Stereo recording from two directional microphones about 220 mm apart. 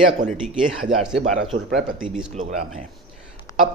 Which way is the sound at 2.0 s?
5° right (ahead or behind).